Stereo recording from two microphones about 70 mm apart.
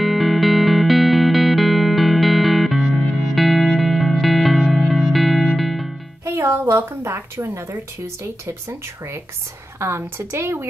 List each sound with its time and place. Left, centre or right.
0.0 s music: centre
6.2 s a sound: right
7.7 s speech: right